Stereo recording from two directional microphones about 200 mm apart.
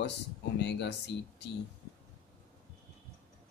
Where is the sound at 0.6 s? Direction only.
60° left (ahead or behind).